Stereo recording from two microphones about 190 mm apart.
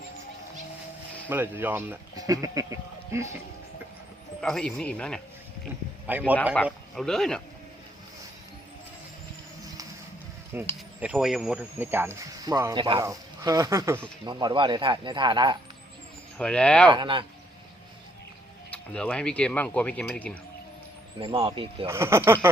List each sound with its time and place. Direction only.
1.3 s speech: 10° right (ahead or behind)
4.4 s speech: 5° left (ahead or behind)
6.1 s speech: 10° right (ahead or behind)
6.7 s speech: centre (ahead or behind)
10.5 s a man's voice: 10° right (ahead or behind)
16.4 s speech: 5° left (ahead or behind)
16.9 s a man's voice: 25° right (ahead or behind)
18.7 s speech: 5° left (ahead or behind)
21.3 s a man's voice: 25° right (ahead or behind)
21.8 s speech: 15° right (ahead or behind)